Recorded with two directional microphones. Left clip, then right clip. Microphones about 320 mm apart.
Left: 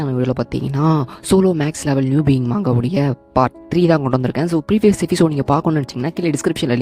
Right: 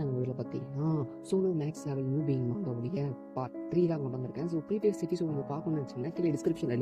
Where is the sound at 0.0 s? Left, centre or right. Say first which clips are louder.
Left 15 dB; left.